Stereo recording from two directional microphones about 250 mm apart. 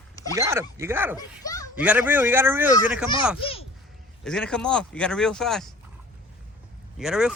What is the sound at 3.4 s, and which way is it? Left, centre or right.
Speech, left.